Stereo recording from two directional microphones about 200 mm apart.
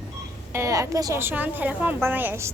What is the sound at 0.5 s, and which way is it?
A woman's voice, 15° right (ahead or behind).